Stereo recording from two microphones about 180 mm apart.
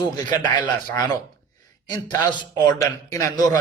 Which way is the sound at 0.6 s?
25° left (ahead or behind).